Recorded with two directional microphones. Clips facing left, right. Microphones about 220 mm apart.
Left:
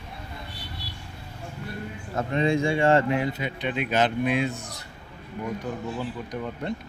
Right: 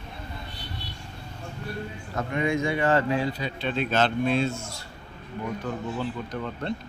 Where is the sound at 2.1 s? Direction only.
30° left (ahead or behind).